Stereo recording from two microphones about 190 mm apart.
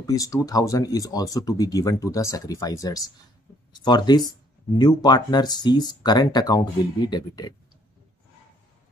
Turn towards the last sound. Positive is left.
turn(degrees=20)  # may be behind; listen again after turning